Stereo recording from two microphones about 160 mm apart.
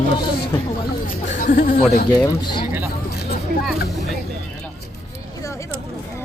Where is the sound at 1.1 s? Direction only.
55° left (ahead or behind).